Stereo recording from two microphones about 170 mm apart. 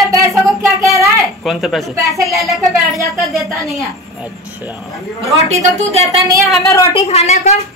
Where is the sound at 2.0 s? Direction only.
20° right (ahead or behind).